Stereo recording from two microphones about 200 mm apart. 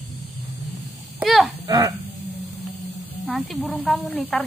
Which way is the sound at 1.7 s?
20° right (ahead or behind).